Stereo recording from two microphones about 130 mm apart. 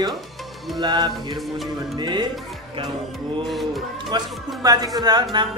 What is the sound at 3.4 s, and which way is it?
Speech, centre (ahead or behind).